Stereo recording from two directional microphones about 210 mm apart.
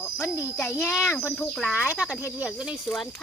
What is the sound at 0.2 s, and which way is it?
A child's voice, 10° left (ahead or behind).